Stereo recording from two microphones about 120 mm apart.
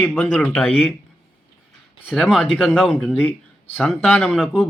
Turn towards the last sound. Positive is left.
turn(degrees=5)  # may be behind; listen again after turning